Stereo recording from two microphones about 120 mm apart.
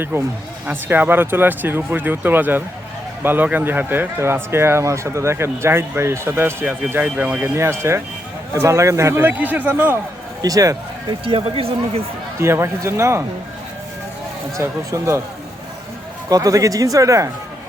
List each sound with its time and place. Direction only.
0.1 s speech: 20° right (ahead or behind)
10.4 s speech: 30° right (ahead or behind)
11.3 s speech: 50° right (ahead or behind)
12.4 s speech: 20° right (ahead or behind)
14.6 s speech: 25° right (ahead or behind)
16.3 s speech: 30° right (ahead or behind)